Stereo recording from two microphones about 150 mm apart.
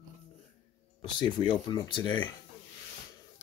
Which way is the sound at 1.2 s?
30° left (ahead or behind).